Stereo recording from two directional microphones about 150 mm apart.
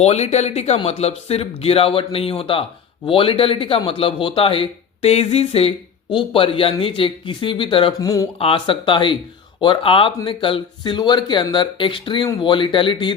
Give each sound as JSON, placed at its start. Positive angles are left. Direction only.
{"t": 0.0, "sound": "a man's voice", "side_deg": 45}
{"t": 7.9, "sound": "speech", "side_deg": 25}
{"t": 8.4, "sound": "a man's voice", "side_deg": 35}